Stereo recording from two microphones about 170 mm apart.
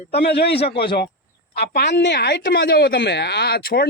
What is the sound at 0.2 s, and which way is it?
Speech, 75° left (ahead or behind).